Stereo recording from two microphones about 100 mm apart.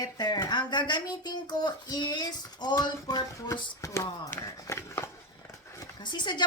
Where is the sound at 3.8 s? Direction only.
30° left (ahead or behind).